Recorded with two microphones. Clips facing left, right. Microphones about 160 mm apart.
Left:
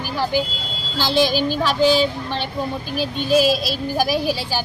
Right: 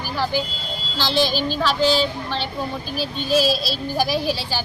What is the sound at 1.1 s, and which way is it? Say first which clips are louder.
Child singing: left 3 dB; 50° left (ahead or behind).